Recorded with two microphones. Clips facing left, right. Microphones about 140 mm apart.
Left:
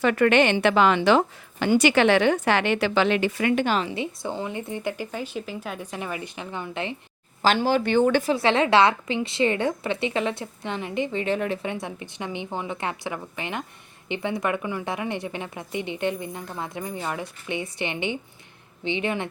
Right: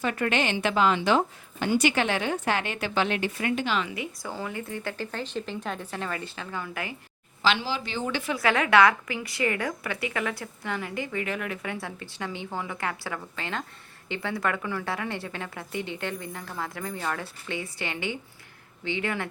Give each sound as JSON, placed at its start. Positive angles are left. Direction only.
{"t": 0.0, "sound": "a woman's voice", "side_deg": 75}
{"t": 3.8, "sound": "speech", "side_deg": 30}
{"t": 7.4, "sound": "speech", "side_deg": 50}
{"t": 8.2, "sound": "a woman's voice", "side_deg": 30}